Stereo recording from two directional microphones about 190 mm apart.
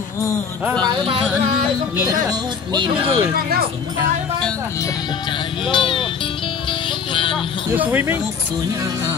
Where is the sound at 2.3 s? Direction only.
20° right (ahead or behind).